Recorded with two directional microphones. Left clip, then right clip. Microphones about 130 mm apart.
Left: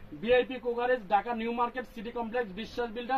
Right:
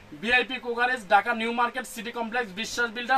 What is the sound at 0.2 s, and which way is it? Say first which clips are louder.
Speech: right 2 dB; 20° right (ahead or behind).